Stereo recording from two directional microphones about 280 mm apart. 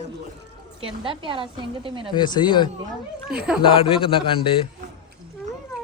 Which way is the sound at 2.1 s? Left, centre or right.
Centre.